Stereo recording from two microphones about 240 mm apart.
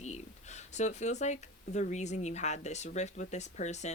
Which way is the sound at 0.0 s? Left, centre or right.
Left.